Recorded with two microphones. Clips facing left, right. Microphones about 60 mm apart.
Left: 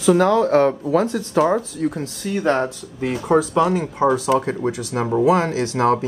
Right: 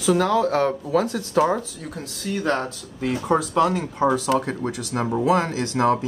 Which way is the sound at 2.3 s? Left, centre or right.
Centre.